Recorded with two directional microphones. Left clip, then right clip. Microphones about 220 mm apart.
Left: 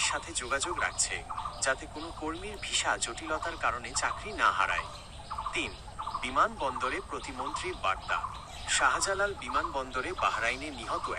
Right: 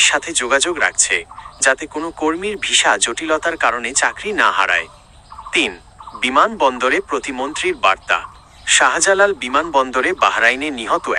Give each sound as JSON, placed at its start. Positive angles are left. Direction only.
{"t": 0.0, "sound": "speech", "side_deg": -45}
{"t": 5.5, "sound": "a sound", "side_deg": -45}
{"t": 6.1, "sound": "speech", "side_deg": -45}